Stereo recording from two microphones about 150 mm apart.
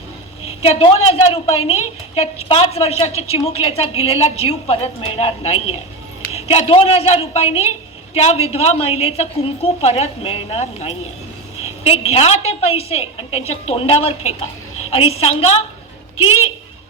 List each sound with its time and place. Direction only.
0.6 s a woman's voice: 40° left (ahead or behind)